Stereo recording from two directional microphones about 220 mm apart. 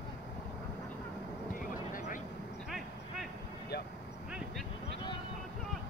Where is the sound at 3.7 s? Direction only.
50° left (ahead or behind).